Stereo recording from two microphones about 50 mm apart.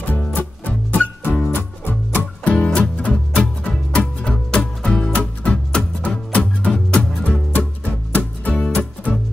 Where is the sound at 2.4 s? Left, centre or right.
Left.